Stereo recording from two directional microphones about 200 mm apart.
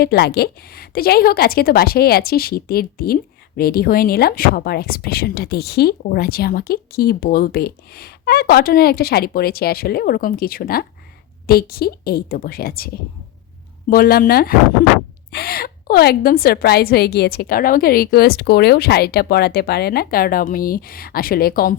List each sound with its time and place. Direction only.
0.0 s speech: 50° left (ahead or behind)
13.9 s speech: 50° left (ahead or behind)